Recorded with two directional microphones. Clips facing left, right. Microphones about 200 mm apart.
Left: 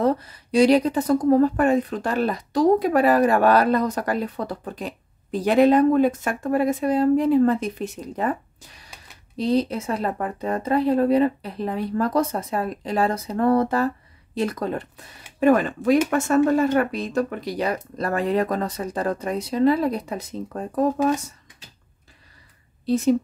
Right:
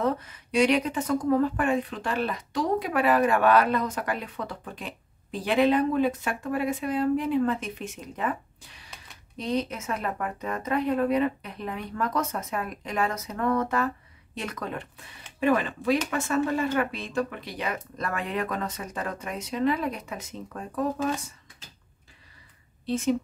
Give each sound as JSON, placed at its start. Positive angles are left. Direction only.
{"t": 0.0, "sound": "speech", "side_deg": 35}
{"t": 22.8, "sound": "speech", "side_deg": 40}